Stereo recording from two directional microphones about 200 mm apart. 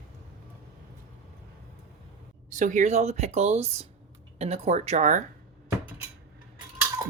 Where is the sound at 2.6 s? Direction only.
40° right (ahead or behind).